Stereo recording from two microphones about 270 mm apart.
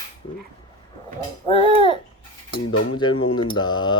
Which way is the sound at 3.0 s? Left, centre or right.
Centre.